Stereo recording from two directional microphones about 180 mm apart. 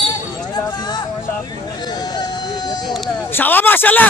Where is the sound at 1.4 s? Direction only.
25° left (ahead or behind).